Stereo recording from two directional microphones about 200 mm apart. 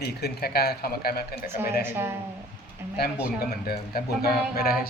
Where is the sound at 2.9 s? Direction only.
50° left (ahead or behind).